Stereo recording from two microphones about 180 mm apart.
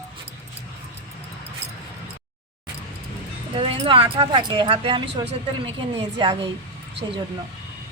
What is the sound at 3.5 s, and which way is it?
A woman's voice, 30° right (ahead or behind).